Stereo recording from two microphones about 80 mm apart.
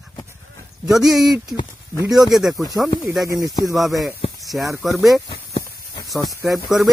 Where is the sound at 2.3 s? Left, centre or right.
Centre.